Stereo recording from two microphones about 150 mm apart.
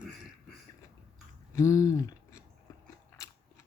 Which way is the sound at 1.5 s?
20° left (ahead or behind).